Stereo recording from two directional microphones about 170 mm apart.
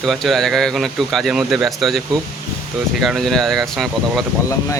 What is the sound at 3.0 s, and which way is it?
Speech, centre (ahead or behind).